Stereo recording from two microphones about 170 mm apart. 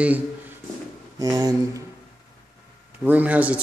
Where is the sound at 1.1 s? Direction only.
20° right (ahead or behind).